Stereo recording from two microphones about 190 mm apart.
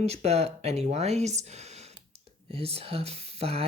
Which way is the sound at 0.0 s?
35° right (ahead or behind).